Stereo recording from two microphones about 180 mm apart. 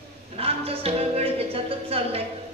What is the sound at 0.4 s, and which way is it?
Music, 35° right (ahead or behind).